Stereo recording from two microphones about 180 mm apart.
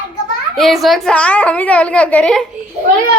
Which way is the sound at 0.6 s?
Centre (ahead or behind).